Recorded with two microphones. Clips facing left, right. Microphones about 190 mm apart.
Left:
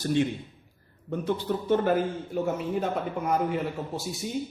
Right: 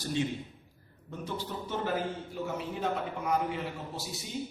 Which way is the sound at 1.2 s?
55° left (ahead or behind).